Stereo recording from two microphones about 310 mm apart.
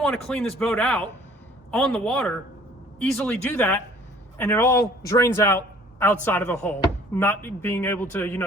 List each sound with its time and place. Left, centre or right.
0.0 s a man's voice: centre